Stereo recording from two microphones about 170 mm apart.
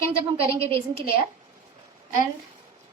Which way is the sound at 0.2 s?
35° right (ahead or behind).